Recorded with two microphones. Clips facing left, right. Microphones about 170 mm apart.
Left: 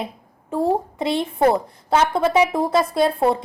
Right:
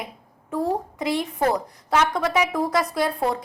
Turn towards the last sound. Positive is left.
turn(degrees=25)  # may be behind; listen again after turning